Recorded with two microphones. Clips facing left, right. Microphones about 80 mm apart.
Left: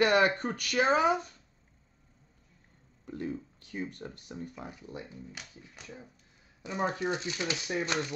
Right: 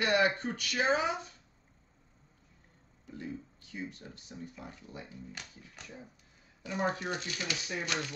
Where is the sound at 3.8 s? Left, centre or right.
Left.